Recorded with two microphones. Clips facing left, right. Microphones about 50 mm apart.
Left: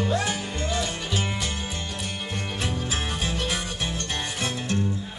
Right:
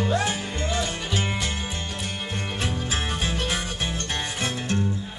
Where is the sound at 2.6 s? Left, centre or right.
Right.